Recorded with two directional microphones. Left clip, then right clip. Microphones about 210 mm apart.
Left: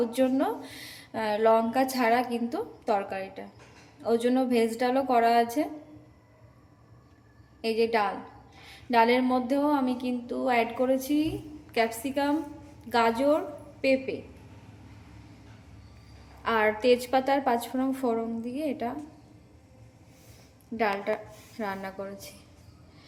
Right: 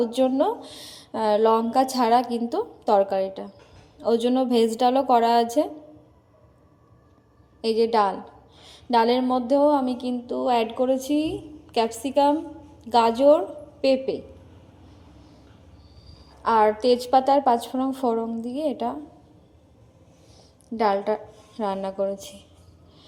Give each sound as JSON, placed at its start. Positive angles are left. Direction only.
{"t": 0.0, "sound": "a woman's voice", "side_deg": -20}
{"t": 7.6, "sound": "a woman's voice", "side_deg": -20}
{"t": 8.6, "sound": "a sound", "side_deg": -20}
{"t": 13.8, "sound": "a woman's voice", "side_deg": -20}
{"t": 16.4, "sound": "a sound", "side_deg": -15}
{"t": 20.7, "sound": "a woman's voice", "side_deg": -20}